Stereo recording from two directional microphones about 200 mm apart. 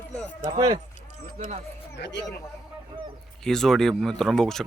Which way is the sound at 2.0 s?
60° left (ahead or behind).